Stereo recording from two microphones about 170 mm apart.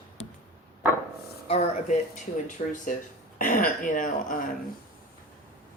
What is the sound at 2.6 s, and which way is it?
A woman's voice, 50° left (ahead or behind).